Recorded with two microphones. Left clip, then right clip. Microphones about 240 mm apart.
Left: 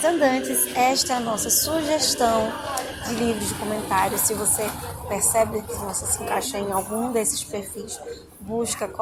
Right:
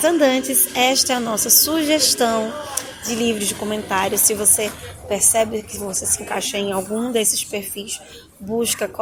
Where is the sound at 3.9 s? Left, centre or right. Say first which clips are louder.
Right 2 dB; right.